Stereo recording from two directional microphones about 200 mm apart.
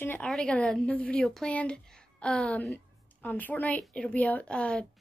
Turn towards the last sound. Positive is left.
turn(degrees=5)  # may be behind; listen again after turning